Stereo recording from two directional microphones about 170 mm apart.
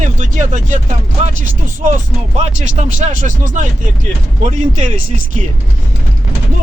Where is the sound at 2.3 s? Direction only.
45° right (ahead or behind).